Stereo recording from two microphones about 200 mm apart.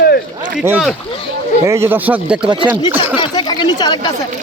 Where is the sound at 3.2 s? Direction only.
20° left (ahead or behind).